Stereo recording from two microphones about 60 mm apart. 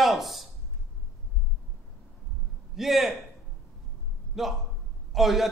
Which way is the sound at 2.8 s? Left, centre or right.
Centre.